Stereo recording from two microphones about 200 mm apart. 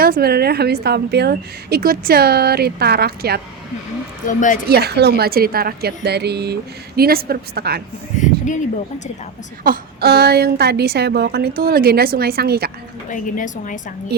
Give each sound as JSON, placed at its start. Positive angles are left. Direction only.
{"t": 0.0, "sound": "a woman's voice", "side_deg": -50}
{"t": 4.3, "sound": "a woman's voice", "side_deg": 40}
{"t": 4.7, "sound": "a woman's voice", "side_deg": -55}
{"t": 8.1, "sound": "a woman's voice", "side_deg": 40}
{"t": 9.6, "sound": "a woman's voice", "side_deg": -50}
{"t": 13.1, "sound": "a woman's voice", "side_deg": 40}
{"t": 14.1, "sound": "a woman's voice", "side_deg": -55}